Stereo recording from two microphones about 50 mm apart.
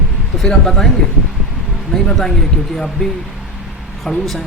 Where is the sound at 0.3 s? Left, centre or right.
Centre.